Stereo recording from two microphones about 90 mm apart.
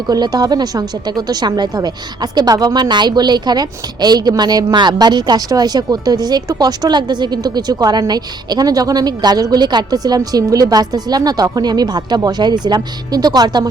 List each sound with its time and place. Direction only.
0.1 s speech: 45° right (ahead or behind)